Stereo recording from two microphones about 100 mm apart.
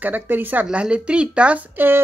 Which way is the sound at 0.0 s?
20° right (ahead or behind).